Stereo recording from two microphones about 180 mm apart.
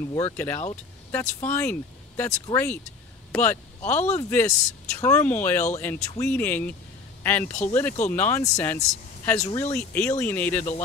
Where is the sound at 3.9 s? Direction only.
40° left (ahead or behind).